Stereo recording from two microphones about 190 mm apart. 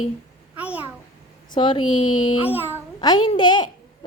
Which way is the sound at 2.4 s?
10° right (ahead or behind).